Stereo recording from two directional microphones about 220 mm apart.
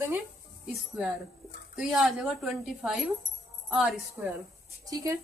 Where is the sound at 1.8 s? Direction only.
Centre (ahead or behind).